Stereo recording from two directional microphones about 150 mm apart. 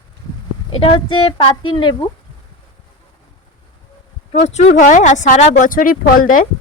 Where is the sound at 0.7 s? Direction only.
35° left (ahead or behind).